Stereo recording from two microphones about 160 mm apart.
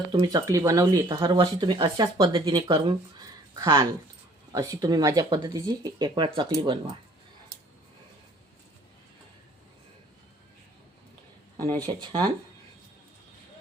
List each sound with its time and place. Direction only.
0.1 s speech: 20° right (ahead or behind)
11.9 s speech: 30° right (ahead or behind)